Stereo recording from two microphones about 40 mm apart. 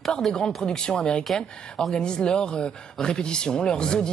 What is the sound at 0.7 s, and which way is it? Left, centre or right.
A woman's voice, centre.